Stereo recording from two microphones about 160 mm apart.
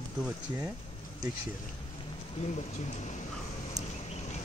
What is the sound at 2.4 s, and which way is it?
Speech, 45° left (ahead or behind).